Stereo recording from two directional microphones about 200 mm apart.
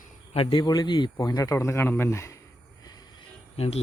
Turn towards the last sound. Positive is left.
turn(degrees=30)  # may be behind; listen again after turning